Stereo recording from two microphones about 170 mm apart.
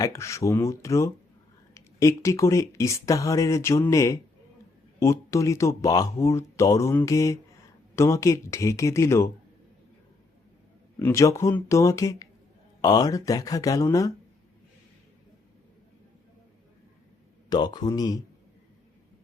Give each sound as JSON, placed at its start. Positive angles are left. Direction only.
{"t": 0.0, "sound": "speech", "side_deg": 15}
{"t": 11.0, "sound": "speech", "side_deg": 15}
{"t": 17.5, "sound": "speech", "side_deg": 25}